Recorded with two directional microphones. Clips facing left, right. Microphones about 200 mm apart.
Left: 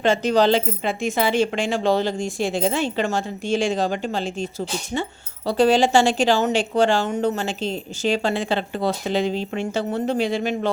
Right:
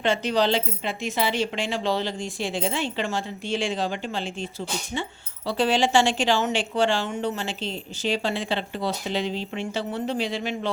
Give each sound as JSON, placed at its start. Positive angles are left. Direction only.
{"t": 0.0, "sound": "speech", "side_deg": 45}
{"t": 5.5, "sound": "speech", "side_deg": 40}